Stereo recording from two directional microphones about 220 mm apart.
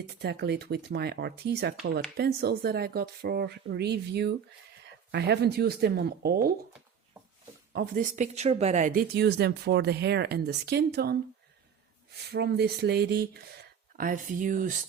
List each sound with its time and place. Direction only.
0.1 s speech: 50° right (ahead or behind)
7.7 s speech: 40° right (ahead or behind)
12.3 s speech: 50° right (ahead or behind)